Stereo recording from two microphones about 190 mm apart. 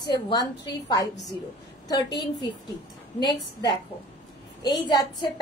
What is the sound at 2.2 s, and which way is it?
Speech, 20° left (ahead or behind).